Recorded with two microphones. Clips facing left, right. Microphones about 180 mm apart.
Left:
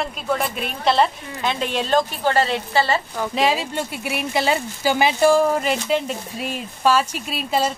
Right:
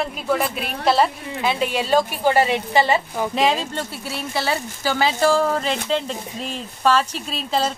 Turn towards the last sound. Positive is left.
turn(degrees=10)  # may be behind; listen again after turning